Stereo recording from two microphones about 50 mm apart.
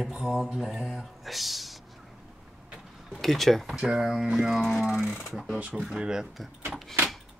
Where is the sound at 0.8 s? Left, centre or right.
Centre.